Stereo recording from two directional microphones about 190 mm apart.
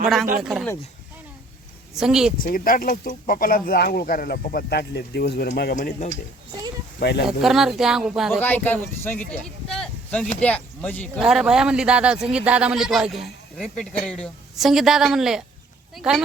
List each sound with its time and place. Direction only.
0.4 s speech: centre (ahead or behind)
2.0 s speech: 5° right (ahead or behind)
2.4 s speech: 50° left (ahead or behind)
7.0 s speech: 60° left (ahead or behind)
7.3 s speech: 5° right (ahead or behind)
8.4 s speech: 10° left (ahead or behind)